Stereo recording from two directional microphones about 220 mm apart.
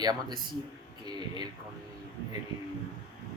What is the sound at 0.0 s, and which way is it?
Speech, 20° right (ahead or behind).